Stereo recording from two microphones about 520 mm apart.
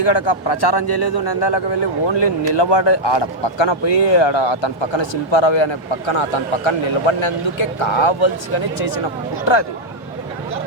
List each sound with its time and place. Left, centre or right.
0.0 s a man's voice: left